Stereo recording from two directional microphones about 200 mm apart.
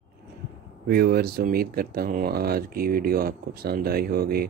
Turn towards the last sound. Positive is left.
turn(degrees=-50)  # may be behind; listen again after turning